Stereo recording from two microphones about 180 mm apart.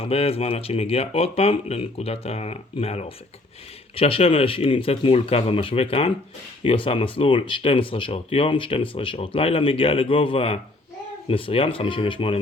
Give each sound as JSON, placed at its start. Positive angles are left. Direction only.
{"t": 0.0, "sound": "speech", "side_deg": 35}